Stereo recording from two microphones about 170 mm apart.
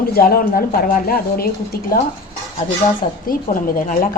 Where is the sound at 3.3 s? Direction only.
55° left (ahead or behind).